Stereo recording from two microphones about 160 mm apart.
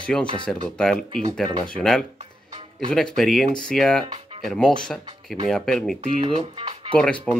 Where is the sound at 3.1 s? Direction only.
Centre (ahead or behind).